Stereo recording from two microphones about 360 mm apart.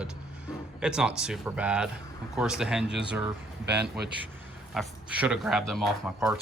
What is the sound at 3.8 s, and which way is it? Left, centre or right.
Speech, right.